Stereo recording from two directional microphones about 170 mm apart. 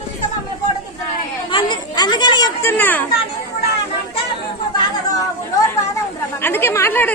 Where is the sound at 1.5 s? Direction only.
30° left (ahead or behind); by 3.0 s 10° left (ahead or behind).